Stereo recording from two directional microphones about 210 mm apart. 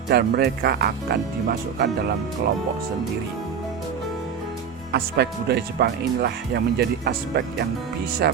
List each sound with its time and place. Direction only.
0.1 s speech: 50° right (ahead or behind)
4.9 s speech: 50° right (ahead or behind)